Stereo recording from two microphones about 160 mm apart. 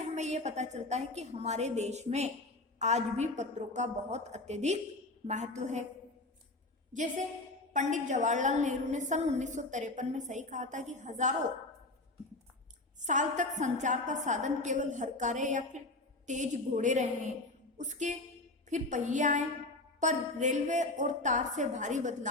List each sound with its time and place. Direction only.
0.1 s a woman's voice: 45° right (ahead or behind)
6.9 s a woman's voice: 50° right (ahead or behind)
13.1 s a woman's voice: 50° right (ahead or behind)